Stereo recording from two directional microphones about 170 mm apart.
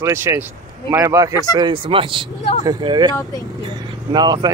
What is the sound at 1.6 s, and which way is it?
Speech, 30° right (ahead or behind).